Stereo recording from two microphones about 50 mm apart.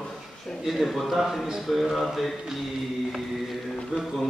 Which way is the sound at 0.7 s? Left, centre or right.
Centre.